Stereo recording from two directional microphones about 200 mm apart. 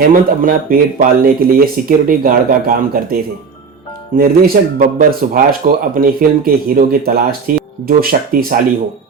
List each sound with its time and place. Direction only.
0.1 s speech: 45° right (ahead or behind)